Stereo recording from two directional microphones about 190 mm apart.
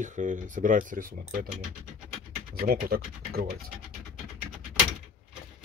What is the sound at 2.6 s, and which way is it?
Speech, 55° right (ahead or behind).